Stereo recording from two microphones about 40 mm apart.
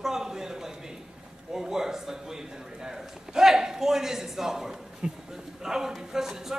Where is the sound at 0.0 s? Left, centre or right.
Centre.